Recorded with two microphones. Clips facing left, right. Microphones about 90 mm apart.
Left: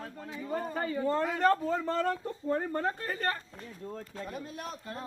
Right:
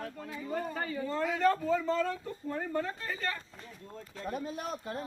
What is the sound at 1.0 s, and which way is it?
Speech, 45° left (ahead or behind).